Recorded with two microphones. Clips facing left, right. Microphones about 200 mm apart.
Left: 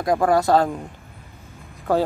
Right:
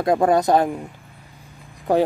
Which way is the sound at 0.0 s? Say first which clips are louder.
Right 1 dB; 25° right (ahead or behind).